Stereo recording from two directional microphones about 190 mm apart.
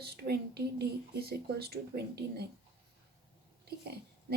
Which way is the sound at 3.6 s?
55° right (ahead or behind).